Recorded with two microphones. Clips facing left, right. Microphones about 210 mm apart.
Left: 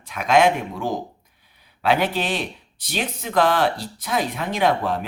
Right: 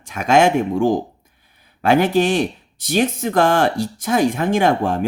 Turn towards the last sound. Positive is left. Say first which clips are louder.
# right 4 dB
turn(degrees=-50)  # may be behind; listen again after turning